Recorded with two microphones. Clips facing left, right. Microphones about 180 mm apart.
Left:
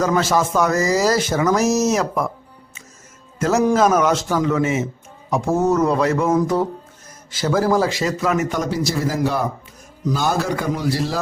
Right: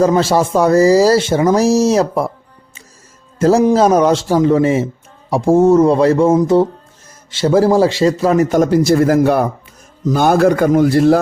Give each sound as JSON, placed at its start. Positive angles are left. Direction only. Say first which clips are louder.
{"t": 0.0, "sound": "speech", "louder": "right 6 dB", "side_deg": -30}
{"t": 3.3, "sound": "a man's voice", "louder": "right 7 dB", "side_deg": -30}
{"t": 3.6, "sound": "speech", "louder": "right 2 dB", "side_deg": -20}
{"t": 3.8, "sound": "a man's voice", "louder": "right 5 dB", "side_deg": -30}